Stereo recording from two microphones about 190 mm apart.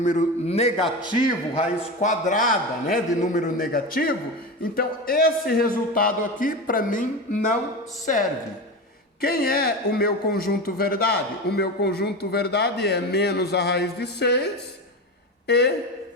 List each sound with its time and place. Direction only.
0.0 s a man's voice: 40° left (ahead or behind)
2.0 s a man's voice: 40° left (ahead or behind)
9.2 s a man's voice: 55° left (ahead or behind)